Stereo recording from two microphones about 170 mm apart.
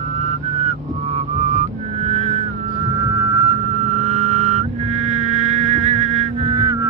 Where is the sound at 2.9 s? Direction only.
20° right (ahead or behind).